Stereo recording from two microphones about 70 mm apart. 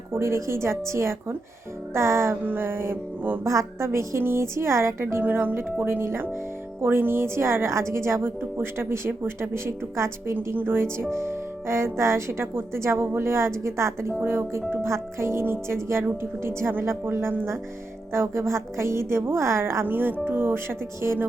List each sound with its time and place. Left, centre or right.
0.1 s a woman's voice: right
2.4 s a woman's voice: right
3.4 s a woman's voice: right
10.3 s a woman's voice: right